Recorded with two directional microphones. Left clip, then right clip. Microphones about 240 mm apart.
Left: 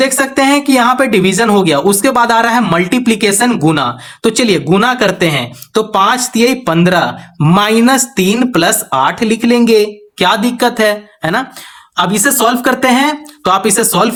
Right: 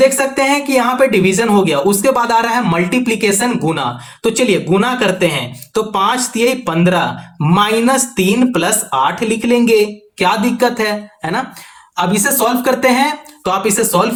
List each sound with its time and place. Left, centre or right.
0.0 s speech: left